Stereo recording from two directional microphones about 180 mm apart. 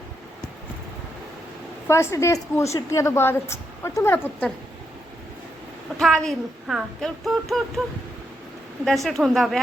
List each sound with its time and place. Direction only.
1.9 s a woman's voice: 15° left (ahead or behind)
6.0 s speech: centre (ahead or behind)
8.8 s speech: centre (ahead or behind)